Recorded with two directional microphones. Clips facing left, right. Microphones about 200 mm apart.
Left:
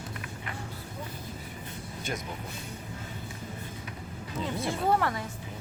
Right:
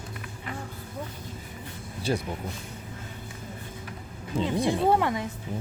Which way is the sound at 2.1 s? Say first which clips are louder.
Right 8 dB; 30° right (ahead or behind).